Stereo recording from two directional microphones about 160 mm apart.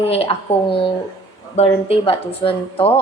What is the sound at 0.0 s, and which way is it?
A woman's voice, 40° left (ahead or behind).